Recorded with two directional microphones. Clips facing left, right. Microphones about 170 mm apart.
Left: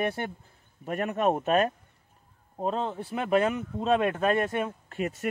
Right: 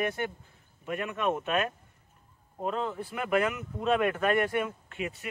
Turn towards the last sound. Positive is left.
turn(degrees=40)  # may be behind; listen again after turning